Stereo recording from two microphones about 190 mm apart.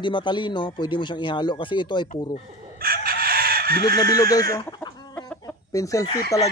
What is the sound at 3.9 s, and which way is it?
Speech, 20° left (ahead or behind).